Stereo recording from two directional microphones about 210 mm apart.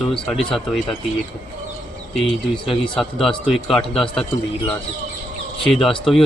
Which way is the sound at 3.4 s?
Centre (ahead or behind).